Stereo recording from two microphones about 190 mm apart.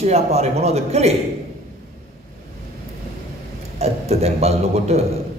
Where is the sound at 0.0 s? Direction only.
35° right (ahead or behind).